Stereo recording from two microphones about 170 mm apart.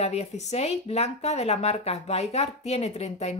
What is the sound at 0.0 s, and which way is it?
Speech, 40° left (ahead or behind).